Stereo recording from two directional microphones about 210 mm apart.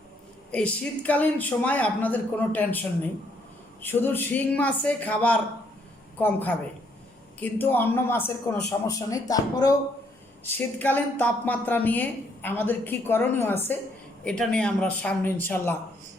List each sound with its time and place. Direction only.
0.5 s a woman's voice: 5° left (ahead or behind)